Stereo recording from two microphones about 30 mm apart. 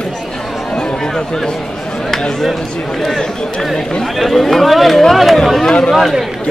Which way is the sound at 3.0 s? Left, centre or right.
Left.